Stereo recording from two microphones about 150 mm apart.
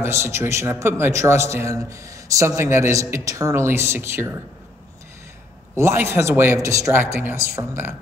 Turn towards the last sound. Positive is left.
turn(degrees=-15)  # may be behind; listen again after turning